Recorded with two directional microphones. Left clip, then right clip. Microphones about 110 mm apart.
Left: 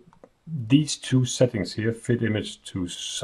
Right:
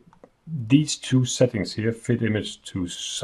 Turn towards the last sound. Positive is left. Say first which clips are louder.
# right 1 dB
turn(degrees=-5)  # may be behind; listen again after turning